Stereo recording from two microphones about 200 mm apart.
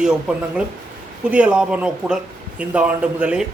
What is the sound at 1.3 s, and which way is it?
Speech, 5° right (ahead or behind).